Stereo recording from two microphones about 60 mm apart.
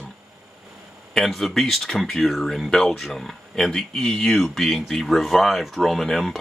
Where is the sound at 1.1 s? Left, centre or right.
Centre.